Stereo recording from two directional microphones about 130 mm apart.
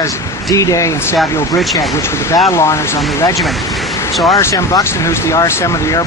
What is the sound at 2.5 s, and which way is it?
Speech, 20° left (ahead or behind).